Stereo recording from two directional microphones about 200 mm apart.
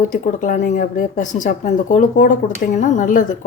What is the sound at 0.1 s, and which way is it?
A woman's voice, 40° left (ahead or behind).